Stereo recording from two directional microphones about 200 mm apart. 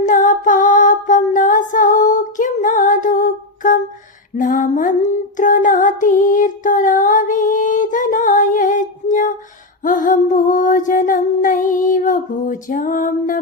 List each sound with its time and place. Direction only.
0.0 s music: 40° left (ahead or behind)